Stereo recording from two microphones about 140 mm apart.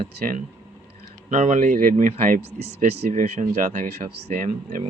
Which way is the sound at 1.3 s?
65° right (ahead or behind).